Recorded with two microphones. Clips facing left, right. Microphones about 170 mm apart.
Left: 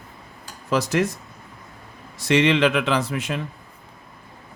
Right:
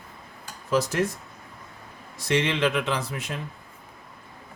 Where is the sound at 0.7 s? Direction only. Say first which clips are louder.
Left 2 dB; 75° left (ahead or behind).